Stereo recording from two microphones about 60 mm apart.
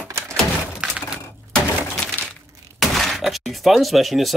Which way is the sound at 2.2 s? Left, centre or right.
Left.